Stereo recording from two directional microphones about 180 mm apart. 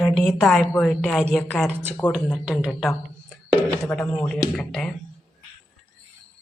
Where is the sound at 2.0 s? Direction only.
25° left (ahead or behind).